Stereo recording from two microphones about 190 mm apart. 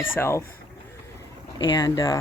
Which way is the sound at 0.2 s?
15° left (ahead or behind).